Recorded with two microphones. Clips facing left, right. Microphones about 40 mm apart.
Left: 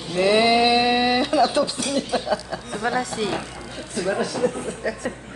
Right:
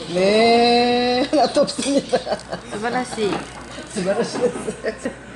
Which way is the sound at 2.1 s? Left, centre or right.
Centre.